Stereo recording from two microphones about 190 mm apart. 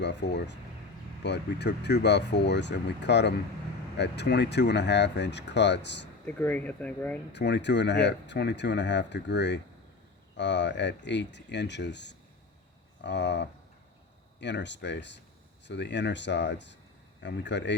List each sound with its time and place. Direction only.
0.0 s speech: 65° left (ahead or behind)
6.2 s speech: 10° left (ahead or behind)
7.3 s speech: 65° left (ahead or behind)